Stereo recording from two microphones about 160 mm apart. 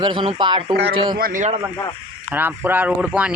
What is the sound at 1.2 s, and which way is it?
Speech, 60° right (ahead or behind).